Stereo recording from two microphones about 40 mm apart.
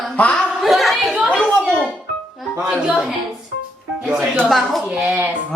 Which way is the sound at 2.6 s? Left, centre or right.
Right.